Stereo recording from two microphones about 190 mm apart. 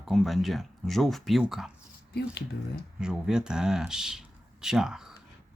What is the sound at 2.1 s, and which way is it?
Speech, 55° left (ahead or behind).